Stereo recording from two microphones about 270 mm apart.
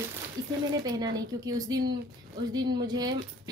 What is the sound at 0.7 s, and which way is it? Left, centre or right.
A woman's voice, centre.